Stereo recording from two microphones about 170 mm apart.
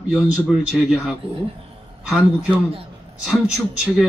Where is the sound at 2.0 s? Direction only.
5° right (ahead or behind).